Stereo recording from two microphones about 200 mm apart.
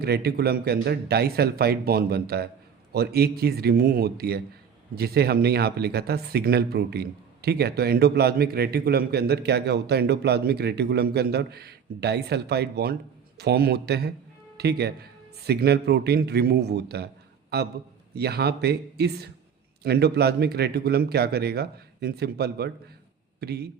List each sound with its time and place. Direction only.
0.0 s speech: 55° right (ahead or behind)